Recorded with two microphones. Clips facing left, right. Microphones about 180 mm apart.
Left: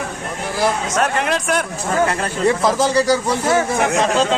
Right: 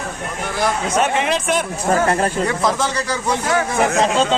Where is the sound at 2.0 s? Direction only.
40° right (ahead or behind).